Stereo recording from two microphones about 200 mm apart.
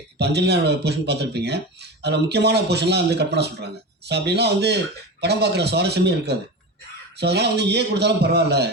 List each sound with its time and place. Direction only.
0.2 s speech: 55° right (ahead or behind)